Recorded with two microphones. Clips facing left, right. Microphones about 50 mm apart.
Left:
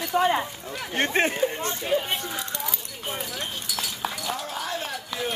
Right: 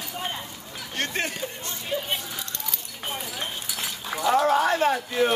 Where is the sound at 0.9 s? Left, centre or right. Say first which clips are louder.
Left 5 dB; left.